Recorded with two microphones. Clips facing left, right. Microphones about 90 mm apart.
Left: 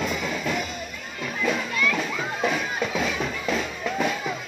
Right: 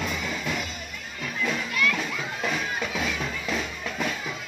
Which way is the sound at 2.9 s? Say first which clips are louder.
Left 3 dB; 5° left (ahead or behind).